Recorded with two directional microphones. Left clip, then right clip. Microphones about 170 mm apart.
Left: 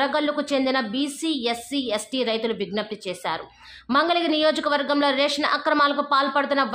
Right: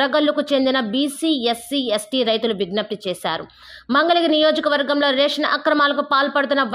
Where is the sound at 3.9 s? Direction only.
25° right (ahead or behind).